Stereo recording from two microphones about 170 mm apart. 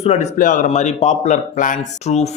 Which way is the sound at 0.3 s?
50° left (ahead or behind).